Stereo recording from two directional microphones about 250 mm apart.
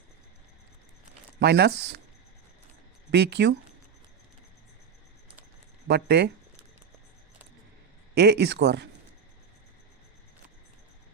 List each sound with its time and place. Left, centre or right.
1.4 s speech: right
3.1 s speech: right
5.9 s speech: right
8.1 s speech: right